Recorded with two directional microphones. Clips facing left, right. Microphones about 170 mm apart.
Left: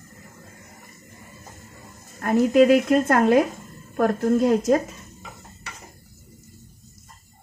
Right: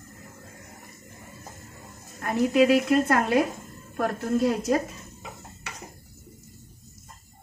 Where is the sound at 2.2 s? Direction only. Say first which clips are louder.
Left 4 dB; 45° left (ahead or behind).